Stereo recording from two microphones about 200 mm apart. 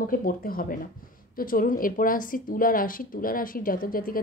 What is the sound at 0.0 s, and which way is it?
A woman's voice, 45° left (ahead or behind).